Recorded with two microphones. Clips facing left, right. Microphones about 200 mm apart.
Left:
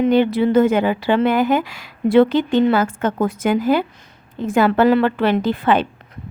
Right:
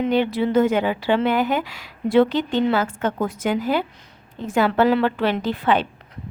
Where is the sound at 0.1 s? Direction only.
50° left (ahead or behind).